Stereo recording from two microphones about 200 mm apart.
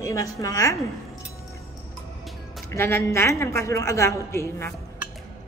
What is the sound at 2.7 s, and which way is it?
A woman's voice, 15° left (ahead or behind).